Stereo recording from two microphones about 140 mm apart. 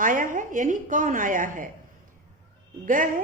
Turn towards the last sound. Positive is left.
turn(degrees=-75)  # may be behind; listen again after turning